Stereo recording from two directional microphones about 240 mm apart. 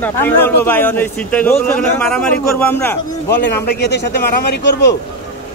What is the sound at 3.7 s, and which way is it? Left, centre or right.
Speech, left.